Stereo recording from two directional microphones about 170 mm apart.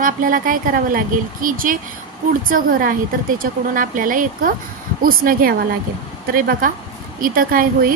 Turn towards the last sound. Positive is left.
turn(degrees=-55)  # may be behind; listen again after turning